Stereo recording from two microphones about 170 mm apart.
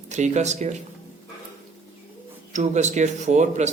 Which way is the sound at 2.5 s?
45° right (ahead or behind).